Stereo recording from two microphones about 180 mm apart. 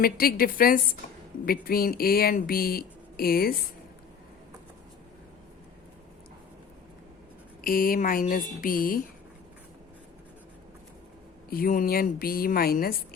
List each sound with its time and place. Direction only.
0.0 s speech: 55° left (ahead or behind)
7.6 s speech: 50° left (ahead or behind)
11.4 s speech: 55° left (ahead or behind)